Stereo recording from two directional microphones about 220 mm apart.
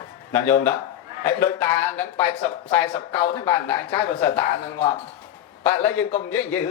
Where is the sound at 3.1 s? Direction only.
25° left (ahead or behind).